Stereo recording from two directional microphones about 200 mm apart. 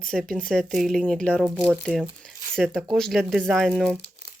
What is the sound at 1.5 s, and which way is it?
Speech, 10° right (ahead or behind).